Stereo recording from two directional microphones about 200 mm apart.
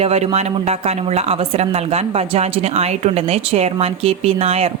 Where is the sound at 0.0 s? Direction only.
30° right (ahead or behind).